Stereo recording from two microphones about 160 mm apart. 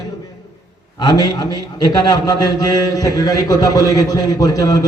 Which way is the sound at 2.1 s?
25° left (ahead or behind).